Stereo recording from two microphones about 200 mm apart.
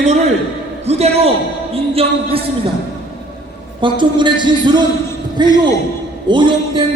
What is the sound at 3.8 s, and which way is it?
A man's voice, 25° right (ahead or behind).